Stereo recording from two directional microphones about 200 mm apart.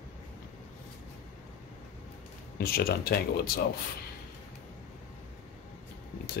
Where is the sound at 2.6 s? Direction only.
50° left (ahead or behind).